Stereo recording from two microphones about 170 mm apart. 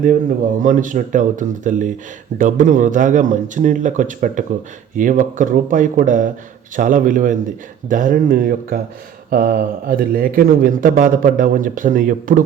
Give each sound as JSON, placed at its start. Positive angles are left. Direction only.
{"t": 0.0, "sound": "a man's voice", "side_deg": -50}